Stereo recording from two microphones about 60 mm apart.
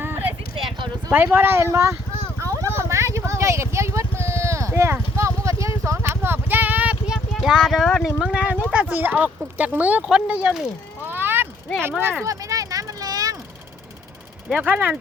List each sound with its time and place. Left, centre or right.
0.0 s clip-clop: right
1.1 s speech: right
1.6 s speech: right
2.4 s vehicle: right
6.1 s a sound: right
7.3 s clip-clop: centre
7.6 s speech: centre
8.2 s speech: centre
11.0 s bicycle: right
11.9 s speech: right
12.2 s vehicle: right
14.5 s speech: right